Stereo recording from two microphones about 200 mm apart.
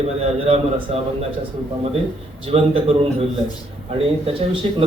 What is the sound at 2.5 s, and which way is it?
Speech, 30° right (ahead or behind).